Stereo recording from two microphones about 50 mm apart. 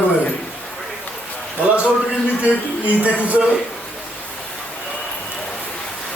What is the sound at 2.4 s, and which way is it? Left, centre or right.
Speech, right.